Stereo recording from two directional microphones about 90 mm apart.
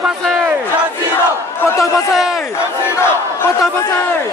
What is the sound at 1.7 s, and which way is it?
Speech, 35° left (ahead or behind).